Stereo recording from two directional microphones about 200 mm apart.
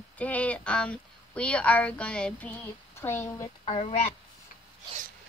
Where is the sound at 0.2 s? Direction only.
5° left (ahead or behind); by 4.1 s 30° left (ahead or behind).